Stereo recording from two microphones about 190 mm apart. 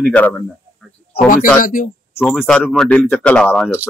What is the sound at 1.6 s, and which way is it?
Speech, 45° left (ahead or behind).